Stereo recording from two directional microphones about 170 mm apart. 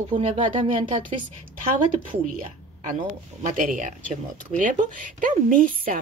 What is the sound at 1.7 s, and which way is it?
Speech, 50° right (ahead or behind).